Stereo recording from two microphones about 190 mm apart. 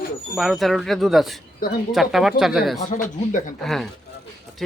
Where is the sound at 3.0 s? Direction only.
40° left (ahead or behind).